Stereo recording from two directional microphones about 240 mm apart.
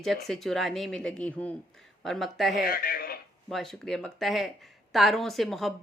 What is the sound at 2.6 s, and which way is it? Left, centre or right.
Speech, left.